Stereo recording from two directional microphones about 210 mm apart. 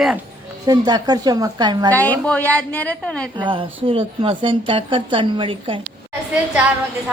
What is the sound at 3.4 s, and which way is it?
A woman's voice, 25° right (ahead or behind).